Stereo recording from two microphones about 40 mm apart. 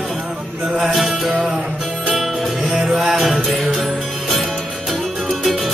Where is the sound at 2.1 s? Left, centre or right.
Centre.